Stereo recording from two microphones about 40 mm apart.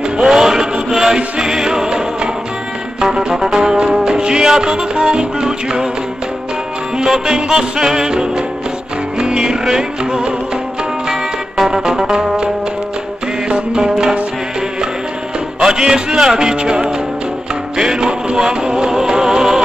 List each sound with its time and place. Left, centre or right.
0.2 s music: centre
7.0 s music: centre
13.5 s music: centre
15.6 s music: centre